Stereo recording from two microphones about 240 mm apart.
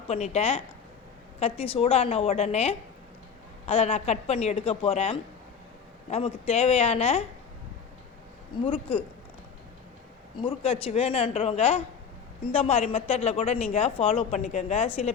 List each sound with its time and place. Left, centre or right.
0.1 s speech: left
8.6 s speech: left
10.4 s speech: left